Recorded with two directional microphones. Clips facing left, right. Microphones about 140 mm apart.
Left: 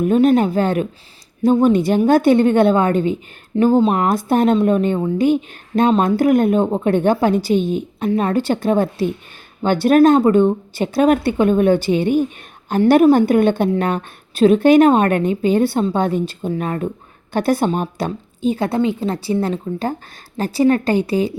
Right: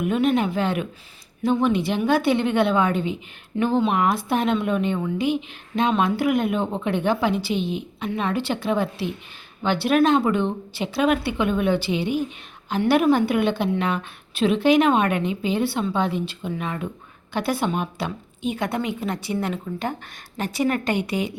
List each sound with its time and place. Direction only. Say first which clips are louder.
0.0 s a woman's voice: left 7 dB; 40° left (ahead or behind)